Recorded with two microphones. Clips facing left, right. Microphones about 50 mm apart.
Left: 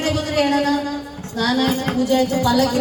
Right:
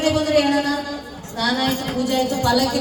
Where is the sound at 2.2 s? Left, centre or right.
Left.